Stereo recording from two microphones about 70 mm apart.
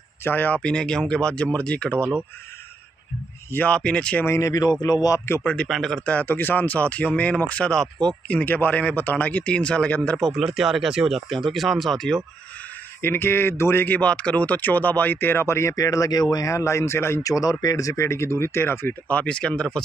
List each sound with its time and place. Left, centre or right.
0.2 s speech: left
0.6 s speech: centre
3.5 s speech: centre
4.3 s speech: left
5.4 s speech: centre
5.7 s speech: centre
6.2 s speech: left; by 8.1 s centre
8.3 s speech: left
10.1 s speech: centre
13.0 s speech: left
17.3 s speech: left
18.0 s speech: left; by 19.8 s centre